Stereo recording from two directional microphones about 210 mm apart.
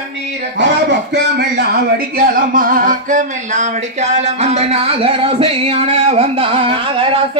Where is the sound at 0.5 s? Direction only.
55° right (ahead or behind).